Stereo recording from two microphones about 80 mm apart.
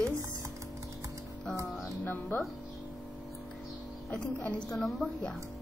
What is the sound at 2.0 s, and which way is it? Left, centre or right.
Speech, left.